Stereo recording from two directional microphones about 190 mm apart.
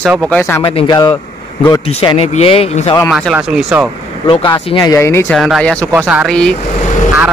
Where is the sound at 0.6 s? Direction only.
25° left (ahead or behind).